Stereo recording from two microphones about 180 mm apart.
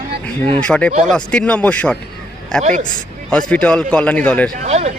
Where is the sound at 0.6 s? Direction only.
5° left (ahead or behind).